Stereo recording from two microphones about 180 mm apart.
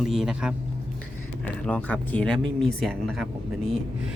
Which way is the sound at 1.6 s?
10° left (ahead or behind).